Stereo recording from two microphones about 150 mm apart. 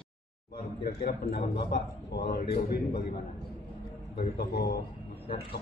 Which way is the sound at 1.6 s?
85° left.